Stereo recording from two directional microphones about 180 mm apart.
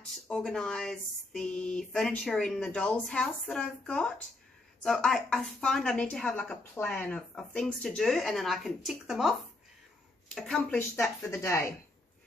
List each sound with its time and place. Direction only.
0.3 s a woman's voice: 5° left (ahead or behind)
11.2 s speech: 15° left (ahead or behind)